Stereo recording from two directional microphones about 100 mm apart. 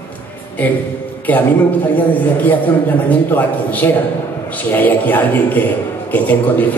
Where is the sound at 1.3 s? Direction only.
15° left (ahead or behind).